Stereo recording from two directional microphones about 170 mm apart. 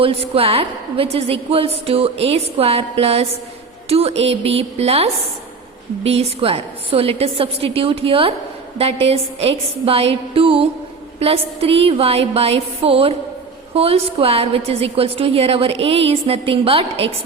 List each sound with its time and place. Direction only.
0.0 s a woman's voice: 35° right (ahead or behind)